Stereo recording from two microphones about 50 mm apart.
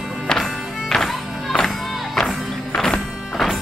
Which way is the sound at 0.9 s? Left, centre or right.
Centre.